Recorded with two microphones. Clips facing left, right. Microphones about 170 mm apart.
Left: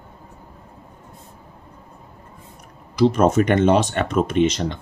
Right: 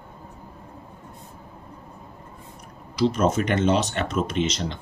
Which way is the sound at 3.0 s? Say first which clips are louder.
Left 5 dB; 55° left (ahead or behind).